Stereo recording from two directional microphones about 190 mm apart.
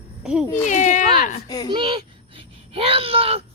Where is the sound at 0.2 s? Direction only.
5° right (ahead or behind).